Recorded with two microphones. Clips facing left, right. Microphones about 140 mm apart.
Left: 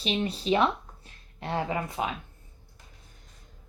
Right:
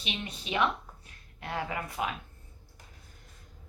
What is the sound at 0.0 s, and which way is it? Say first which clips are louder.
Speech: left 10 dB; 35° left (ahead or behind).